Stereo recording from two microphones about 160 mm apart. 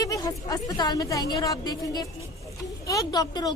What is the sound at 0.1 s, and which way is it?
Speech, 20° left (ahead or behind).